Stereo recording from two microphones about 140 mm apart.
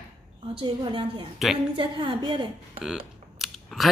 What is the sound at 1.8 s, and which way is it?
Speech, 35° right (ahead or behind).